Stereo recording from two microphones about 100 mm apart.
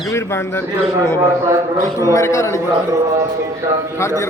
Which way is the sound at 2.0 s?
30° left (ahead or behind).